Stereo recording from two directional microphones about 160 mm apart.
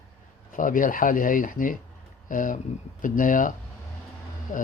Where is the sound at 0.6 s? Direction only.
55° left (ahead or behind).